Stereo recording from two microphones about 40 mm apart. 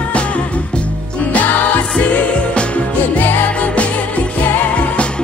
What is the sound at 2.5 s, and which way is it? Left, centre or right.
Music, left.